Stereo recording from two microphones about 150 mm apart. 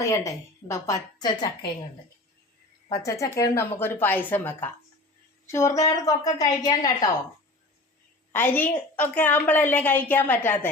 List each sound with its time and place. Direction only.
0.1 s a woman's voice: 20° left (ahead or behind)
2.9 s a woman's voice: 20° left (ahead or behind)
8.3 s a woman's voice: 15° left (ahead or behind)